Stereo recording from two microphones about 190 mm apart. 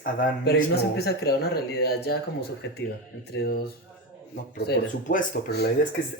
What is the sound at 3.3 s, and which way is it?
Speech, 55° left (ahead or behind).